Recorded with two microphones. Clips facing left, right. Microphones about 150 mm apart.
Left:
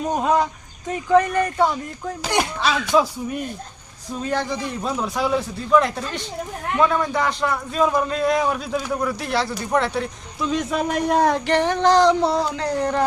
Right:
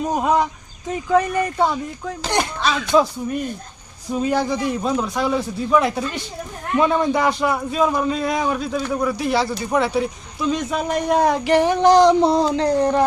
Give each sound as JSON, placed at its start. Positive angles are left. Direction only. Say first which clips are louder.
{"t": 0.1, "sound": "speech", "louder": "even", "side_deg": -5}
{"t": 2.0, "sound": "a man's voice", "louder": "even", "side_deg": 5}
{"t": 4.1, "sound": "a man's voice", "louder": "right 4 dB", "side_deg": -5}
{"t": 6.8, "sound": "a man's voice", "louder": "right 3 dB", "side_deg": -20}